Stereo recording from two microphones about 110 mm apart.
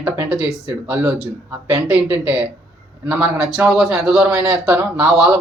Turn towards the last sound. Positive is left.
turn(degrees=-5)  # may be behind; listen again after turning